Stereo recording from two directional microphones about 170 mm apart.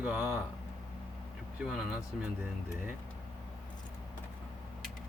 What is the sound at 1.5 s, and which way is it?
Speech, 5° right (ahead or behind).